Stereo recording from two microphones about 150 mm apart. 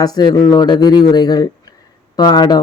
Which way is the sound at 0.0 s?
25° left (ahead or behind).